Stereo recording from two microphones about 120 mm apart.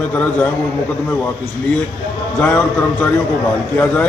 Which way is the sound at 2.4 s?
15° left (ahead or behind).